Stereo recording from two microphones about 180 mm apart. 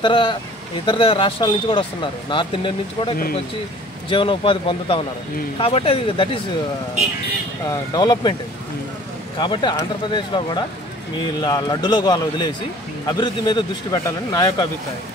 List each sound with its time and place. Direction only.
0.0 s speech: 25° left (ahead or behind)
7.7 s speech: 20° left (ahead or behind)
9.4 s speech: 25° left (ahead or behind)